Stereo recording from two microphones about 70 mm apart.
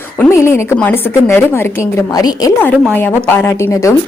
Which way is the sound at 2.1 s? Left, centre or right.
Left.